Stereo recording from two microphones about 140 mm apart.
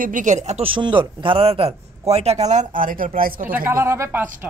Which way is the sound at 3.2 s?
90° right.